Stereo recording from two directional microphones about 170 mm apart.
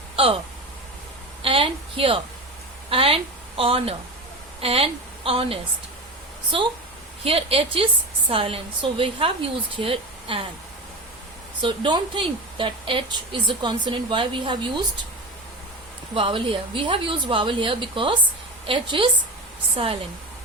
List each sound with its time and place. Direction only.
0.2 s a sound: 30° right (ahead or behind)
1.4 s a sound: 30° right (ahead or behind)
2.9 s a woman's voice: 35° right (ahead or behind)
7.3 s a woman's voice: 35° right (ahead or behind)
11.6 s speech: 30° right (ahead or behind)
16.1 s a woman's voice: 30° right (ahead or behind)